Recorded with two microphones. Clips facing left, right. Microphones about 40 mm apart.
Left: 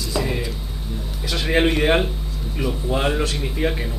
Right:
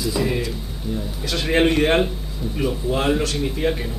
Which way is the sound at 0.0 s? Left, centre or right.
Centre.